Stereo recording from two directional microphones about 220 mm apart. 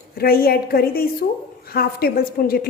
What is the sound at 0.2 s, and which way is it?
Speech, 45° left (ahead or behind).